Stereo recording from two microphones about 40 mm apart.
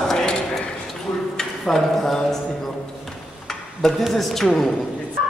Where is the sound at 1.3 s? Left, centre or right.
Centre.